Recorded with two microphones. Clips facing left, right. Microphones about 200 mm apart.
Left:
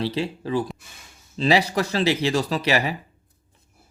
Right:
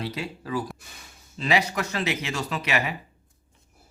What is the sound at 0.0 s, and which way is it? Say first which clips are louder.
Speech: left 7 dB; 30° left (ahead or behind).